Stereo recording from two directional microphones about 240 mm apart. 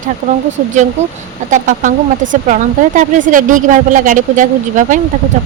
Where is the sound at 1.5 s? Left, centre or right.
Right.